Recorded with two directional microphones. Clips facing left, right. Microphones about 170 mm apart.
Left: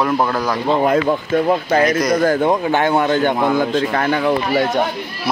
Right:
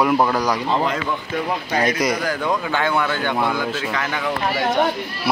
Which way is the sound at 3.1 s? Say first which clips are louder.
Left 6 dB; 45° left (ahead or behind).